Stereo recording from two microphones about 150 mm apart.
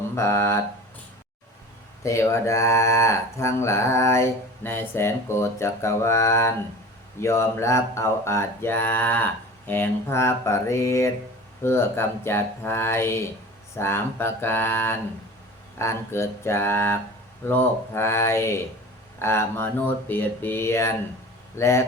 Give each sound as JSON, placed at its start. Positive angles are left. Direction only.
{"t": 0.2, "sound": "mantra", "side_deg": 15}
{"t": 2.0, "sound": "speech", "side_deg": 20}
{"t": 7.2, "sound": "mantra", "side_deg": 20}
{"t": 21.5, "sound": "speech", "side_deg": 20}